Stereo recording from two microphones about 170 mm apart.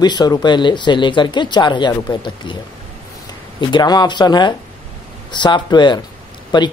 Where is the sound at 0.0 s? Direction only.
25° left (ahead or behind).